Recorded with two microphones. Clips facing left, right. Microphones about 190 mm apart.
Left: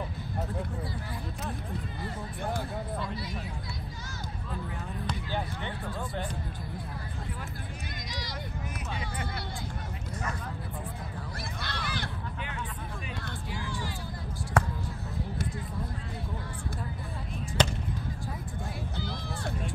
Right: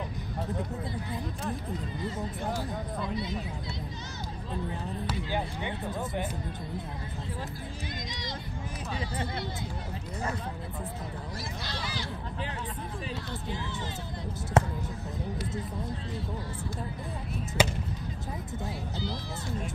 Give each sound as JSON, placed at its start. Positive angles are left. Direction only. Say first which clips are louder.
{"t": 3.0, "sound": "speech", "louder": "right 3 dB", "side_deg": -20}
{"t": 5.0, "sound": "speech", "louder": "right 1 dB", "side_deg": -15}
{"t": 11.6, "sound": "speech", "louder": "left 3 dB", "side_deg": 55}
{"t": 13.5, "sound": "speech", "louder": "even", "side_deg": -20}
{"t": 17.6, "sound": "speech", "louder": "right 1 dB", "side_deg": -10}
{"t": 18.9, "sound": "speech", "louder": "right 1 dB", "side_deg": 55}